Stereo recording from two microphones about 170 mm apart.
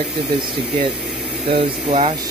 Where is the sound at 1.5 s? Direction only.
40° right (ahead or behind).